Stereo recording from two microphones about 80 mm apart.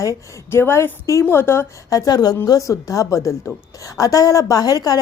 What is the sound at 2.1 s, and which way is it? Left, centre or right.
A woman's voice, left.